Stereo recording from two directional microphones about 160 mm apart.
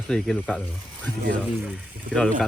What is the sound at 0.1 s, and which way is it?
Pant, 5° left (ahead or behind).